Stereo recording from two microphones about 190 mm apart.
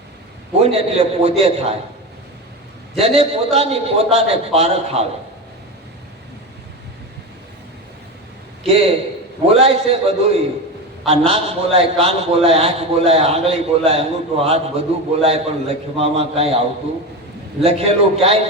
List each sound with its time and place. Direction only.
0.6 s a man's voice: 30° right (ahead or behind)
3.0 s a man's voice: 30° right (ahead or behind)
8.6 s a man's voice: 30° right (ahead or behind)
17.6 s a man's voice: 30° right (ahead or behind)